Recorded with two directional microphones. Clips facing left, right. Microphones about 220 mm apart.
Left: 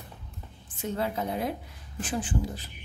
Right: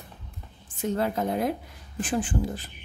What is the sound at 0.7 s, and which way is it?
A woman's voice, 50° right (ahead or behind).